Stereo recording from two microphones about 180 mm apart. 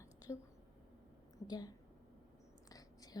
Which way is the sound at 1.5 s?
20° left (ahead or behind).